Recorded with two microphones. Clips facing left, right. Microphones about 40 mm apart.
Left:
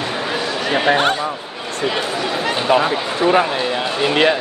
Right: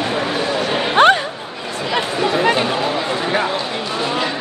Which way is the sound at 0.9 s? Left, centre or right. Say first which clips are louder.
Right 5 dB; right.